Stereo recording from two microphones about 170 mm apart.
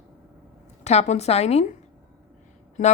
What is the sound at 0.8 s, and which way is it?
Speech, 40° left (ahead or behind).